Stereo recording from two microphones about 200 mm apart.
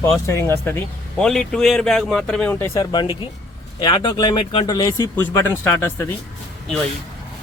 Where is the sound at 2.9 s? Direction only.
25° left (ahead or behind).